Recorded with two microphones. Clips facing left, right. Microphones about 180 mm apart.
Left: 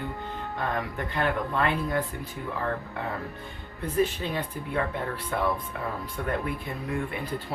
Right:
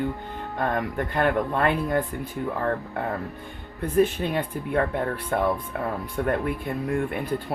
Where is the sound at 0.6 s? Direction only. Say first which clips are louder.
Right 5 dB; 50° right (ahead or behind).